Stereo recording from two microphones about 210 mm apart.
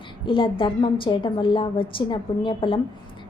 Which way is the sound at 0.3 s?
25° left (ahead or behind).